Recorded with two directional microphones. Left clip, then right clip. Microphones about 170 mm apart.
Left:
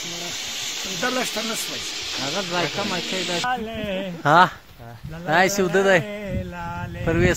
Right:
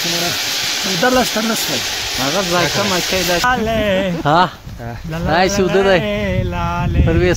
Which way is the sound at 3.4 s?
45° right (ahead or behind).